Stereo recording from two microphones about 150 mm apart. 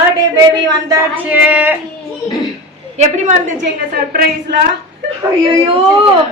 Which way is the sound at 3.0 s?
50° right (ahead or behind).